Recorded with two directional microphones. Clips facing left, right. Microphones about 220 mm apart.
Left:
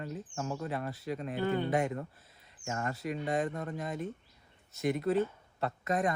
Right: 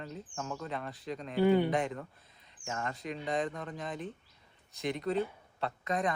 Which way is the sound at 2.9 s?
5° left (ahead or behind).